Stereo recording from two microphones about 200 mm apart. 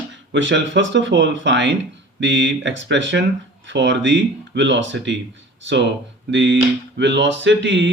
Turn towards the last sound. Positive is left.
turn(degrees=-65)  # may be behind; listen again after turning